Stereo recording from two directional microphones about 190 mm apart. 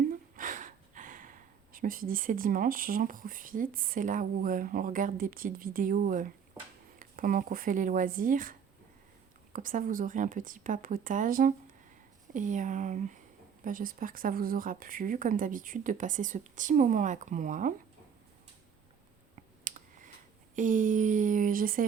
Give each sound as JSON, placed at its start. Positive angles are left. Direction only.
{"t": 0.3, "sound": "speech", "side_deg": -45}
{"t": 19.6, "sound": "clicking", "side_deg": -45}
{"t": 20.6, "sound": "speech", "side_deg": -45}